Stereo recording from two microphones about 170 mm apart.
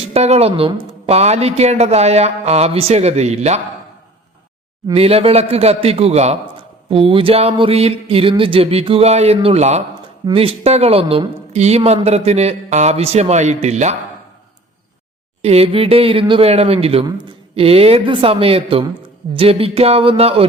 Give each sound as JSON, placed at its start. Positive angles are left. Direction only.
{"t": 0.0, "sound": "a man's voice", "side_deg": -40}
{"t": 4.9, "sound": "a man's voice", "side_deg": -35}
{"t": 15.4, "sound": "a man's voice", "side_deg": -35}